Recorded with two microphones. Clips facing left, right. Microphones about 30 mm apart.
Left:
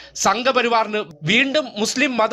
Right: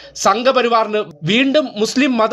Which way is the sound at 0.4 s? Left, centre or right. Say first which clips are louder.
Right 3 dB; centre.